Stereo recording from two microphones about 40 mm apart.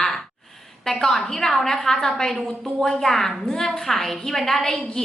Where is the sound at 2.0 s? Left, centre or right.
Centre.